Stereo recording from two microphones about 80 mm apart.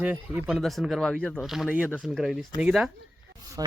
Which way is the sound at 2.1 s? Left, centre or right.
Centre.